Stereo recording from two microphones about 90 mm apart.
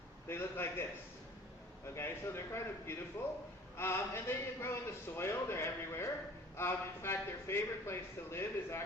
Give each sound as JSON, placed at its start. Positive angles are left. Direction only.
{"t": 0.3, "sound": "a man's voice", "side_deg": 25}
{"t": 2.0, "sound": "a man's voice", "side_deg": 25}